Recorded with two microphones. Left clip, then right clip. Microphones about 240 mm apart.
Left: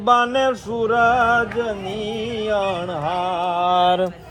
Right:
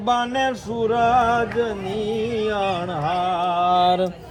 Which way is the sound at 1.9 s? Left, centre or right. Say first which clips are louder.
Right 2 dB; centre.